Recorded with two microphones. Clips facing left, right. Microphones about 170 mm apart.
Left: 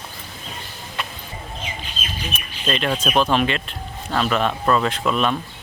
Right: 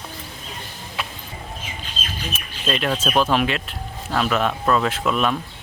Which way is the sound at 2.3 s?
5° right (ahead or behind).